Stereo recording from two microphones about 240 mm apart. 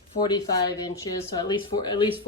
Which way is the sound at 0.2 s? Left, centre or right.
Centre.